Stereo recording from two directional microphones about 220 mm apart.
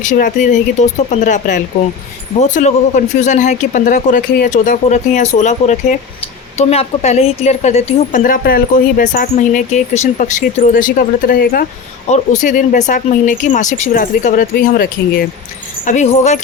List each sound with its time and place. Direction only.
0.0 s a woman's voice: 35° left (ahead or behind)
15.9 s a woman's voice: 30° left (ahead or behind)